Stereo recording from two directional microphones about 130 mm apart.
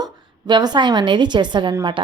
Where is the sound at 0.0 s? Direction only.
35° right (ahead or behind).